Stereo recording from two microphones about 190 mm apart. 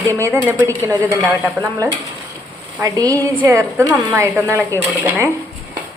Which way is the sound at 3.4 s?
15° right (ahead or behind).